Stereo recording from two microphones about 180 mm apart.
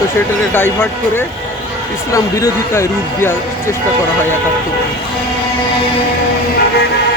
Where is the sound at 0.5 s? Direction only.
10° left (ahead or behind).